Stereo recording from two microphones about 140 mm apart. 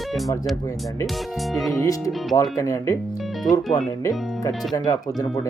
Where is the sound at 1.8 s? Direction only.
25° left (ahead or behind).